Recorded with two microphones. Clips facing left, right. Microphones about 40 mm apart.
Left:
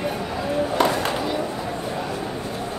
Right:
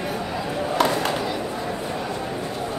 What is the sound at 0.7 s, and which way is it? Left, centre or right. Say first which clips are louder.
Chop: right 1 dB; centre.